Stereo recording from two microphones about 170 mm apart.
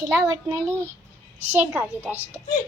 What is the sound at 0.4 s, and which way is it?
A woman's voice, 20° right (ahead or behind).